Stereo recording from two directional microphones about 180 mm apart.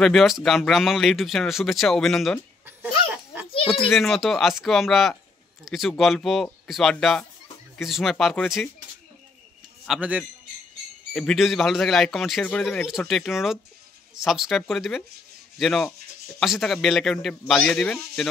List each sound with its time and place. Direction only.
0.0 s speech: centre (ahead or behind)
3.4 s a sound: 30° left (ahead or behind)
3.8 s speech: centre (ahead or behind)
9.8 s a man's voice: 10° right (ahead or behind)
15.5 s rub: centre (ahead or behind)
16.3 s speech: centre (ahead or behind)